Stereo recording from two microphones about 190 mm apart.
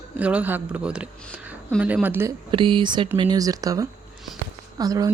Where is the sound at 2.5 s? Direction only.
25° right (ahead or behind).